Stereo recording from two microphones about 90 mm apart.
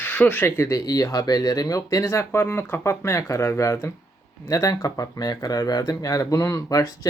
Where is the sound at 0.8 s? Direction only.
45° left (ahead or behind).